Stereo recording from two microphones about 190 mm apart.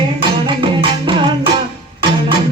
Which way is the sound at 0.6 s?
25° right (ahead or behind).